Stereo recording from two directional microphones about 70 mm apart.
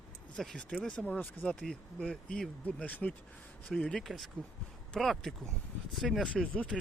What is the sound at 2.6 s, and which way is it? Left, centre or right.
Speech, left.